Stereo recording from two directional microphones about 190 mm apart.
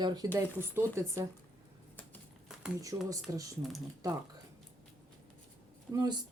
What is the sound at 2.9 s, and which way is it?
Speech, 15° right (ahead or behind).